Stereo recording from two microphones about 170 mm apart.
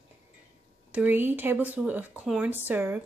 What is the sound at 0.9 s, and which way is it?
Speech, 10° right (ahead or behind).